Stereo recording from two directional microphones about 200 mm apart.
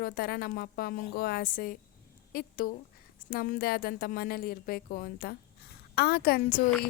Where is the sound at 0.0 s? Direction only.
50° left (ahead or behind).